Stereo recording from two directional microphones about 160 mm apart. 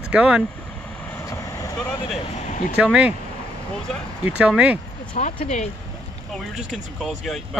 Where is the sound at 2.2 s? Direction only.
45° left (ahead or behind).